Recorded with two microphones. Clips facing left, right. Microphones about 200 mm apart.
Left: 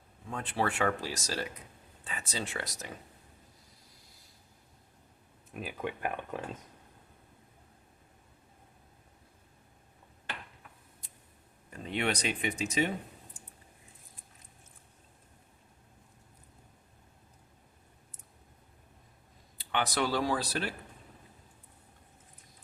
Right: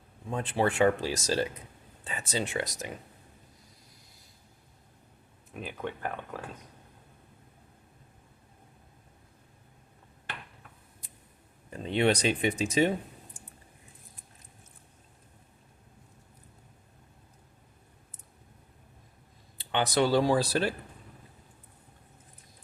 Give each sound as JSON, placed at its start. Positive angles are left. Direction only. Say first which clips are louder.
{"t": 0.3, "sound": "speech", "louder": "right 4 dB", "side_deg": -25}
{"t": 5.5, "sound": "speech", "louder": "even", "side_deg": 5}
{"t": 11.7, "sound": "speech", "louder": "right 7 dB", "side_deg": -30}
{"t": 19.5, "sound": "speech", "louder": "right 5 dB", "side_deg": -25}